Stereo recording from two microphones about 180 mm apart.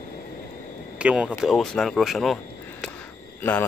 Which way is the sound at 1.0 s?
5° right (ahead or behind).